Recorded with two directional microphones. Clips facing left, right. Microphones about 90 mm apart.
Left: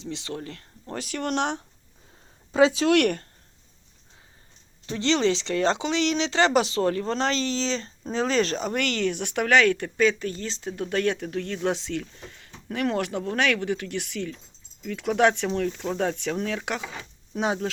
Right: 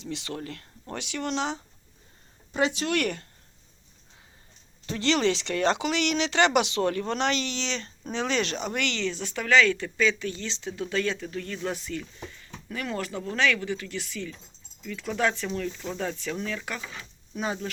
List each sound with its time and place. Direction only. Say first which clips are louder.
0.0 s speech: left 1 dB; 30° left (ahead or behind)
1.0 s speech: left 3 dB; 50° left (ahead or behind)
2.8 s speech: left 7 dB; 75° left (ahead or behind)
4.9 s speech: left 2 dB; 25° left (ahead or behind); by 17.7 s 75° left (ahead or behind)